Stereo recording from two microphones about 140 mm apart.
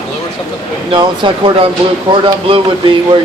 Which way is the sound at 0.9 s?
35° right (ahead or behind).